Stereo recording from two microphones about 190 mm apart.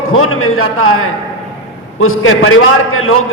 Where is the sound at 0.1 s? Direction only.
90° left.